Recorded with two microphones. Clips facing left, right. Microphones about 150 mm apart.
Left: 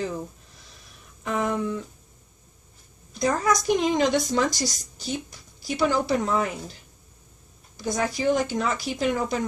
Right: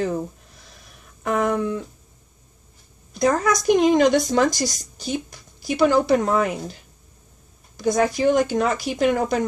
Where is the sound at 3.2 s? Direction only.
55° right (ahead or behind).